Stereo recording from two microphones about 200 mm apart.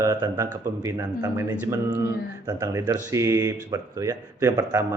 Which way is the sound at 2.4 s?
15° right (ahead or behind).